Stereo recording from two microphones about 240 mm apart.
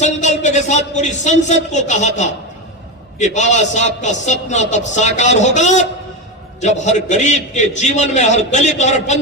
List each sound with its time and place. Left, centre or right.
0.0 s a man's voice: left